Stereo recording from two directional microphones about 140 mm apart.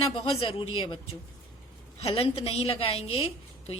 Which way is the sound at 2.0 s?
45° left (ahead or behind).